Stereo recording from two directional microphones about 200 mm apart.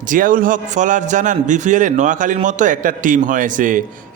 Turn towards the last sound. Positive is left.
turn(degrees=-40)  # may be behind; listen again after turning